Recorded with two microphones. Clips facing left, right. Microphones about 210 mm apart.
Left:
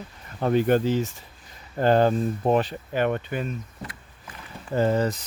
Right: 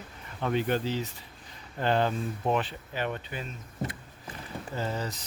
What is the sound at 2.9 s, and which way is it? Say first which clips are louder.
Speech: left 9 dB; 55° left (ahead or behind).